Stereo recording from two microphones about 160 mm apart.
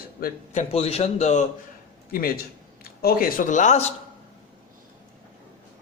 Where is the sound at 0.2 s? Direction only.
65° left (ahead or behind).